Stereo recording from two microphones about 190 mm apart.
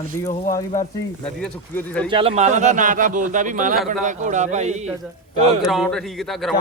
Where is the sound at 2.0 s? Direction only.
30° right (ahead or behind).